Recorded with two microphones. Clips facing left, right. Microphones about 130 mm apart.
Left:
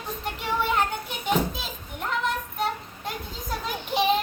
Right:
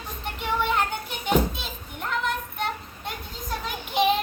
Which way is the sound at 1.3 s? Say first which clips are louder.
Right 2 dB; centre (ahead or behind).